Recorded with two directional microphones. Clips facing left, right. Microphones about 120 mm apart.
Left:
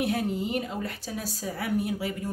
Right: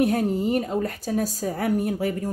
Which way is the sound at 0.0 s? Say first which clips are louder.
Right 6 dB; 45° right (ahead or behind).